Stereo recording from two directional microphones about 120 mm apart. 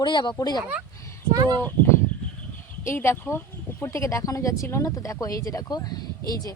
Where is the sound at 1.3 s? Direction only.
35° right (ahead or behind).